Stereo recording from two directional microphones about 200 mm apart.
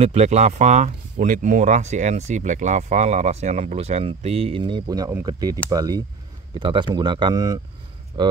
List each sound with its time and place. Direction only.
0.0 s speech: 30° right (ahead or behind)